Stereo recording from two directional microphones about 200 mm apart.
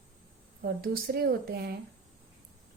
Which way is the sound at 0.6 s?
50° right (ahead or behind).